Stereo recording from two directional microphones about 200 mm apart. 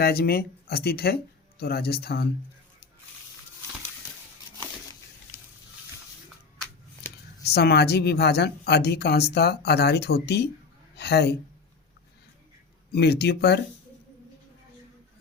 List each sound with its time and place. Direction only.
0.0 s speech: 50° left (ahead or behind)
7.4 s a woman's voice: 55° left (ahead or behind)
12.9 s speech: 55° left (ahead or behind)